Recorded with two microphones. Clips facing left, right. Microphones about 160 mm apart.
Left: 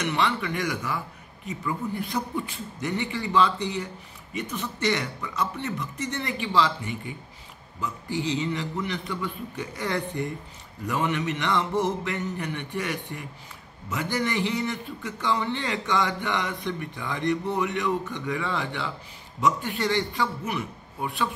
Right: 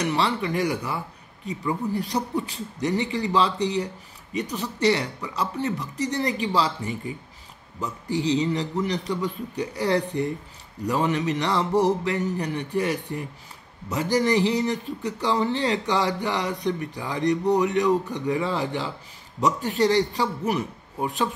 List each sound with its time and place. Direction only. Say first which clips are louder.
0.0 s speech: right 2 dB; 35° right (ahead or behind)